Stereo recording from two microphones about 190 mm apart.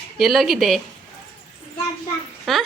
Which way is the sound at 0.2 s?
Centre (ahead or behind).